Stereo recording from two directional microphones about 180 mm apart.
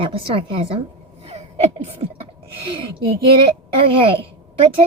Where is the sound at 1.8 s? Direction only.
35° right (ahead or behind).